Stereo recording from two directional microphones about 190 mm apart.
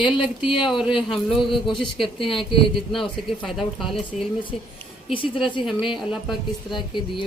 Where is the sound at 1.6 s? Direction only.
25° left (ahead or behind).